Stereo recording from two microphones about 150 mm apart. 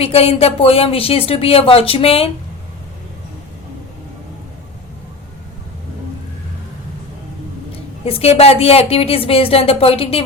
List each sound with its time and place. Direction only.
0.0 s speech: 40° left (ahead or behind)
8.0 s speech: 40° left (ahead or behind)